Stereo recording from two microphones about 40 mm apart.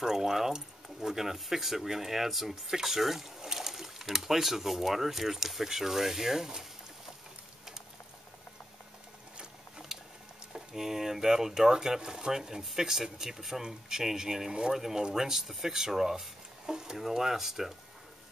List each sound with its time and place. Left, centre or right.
0.0 s speech: centre
9.9 s a sound: centre
10.5 s speech: centre